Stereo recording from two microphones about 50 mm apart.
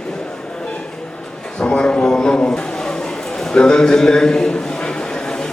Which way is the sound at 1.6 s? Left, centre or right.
Left.